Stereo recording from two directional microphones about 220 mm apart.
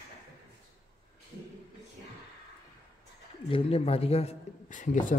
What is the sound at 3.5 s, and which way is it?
Speech, 25° left (ahead or behind).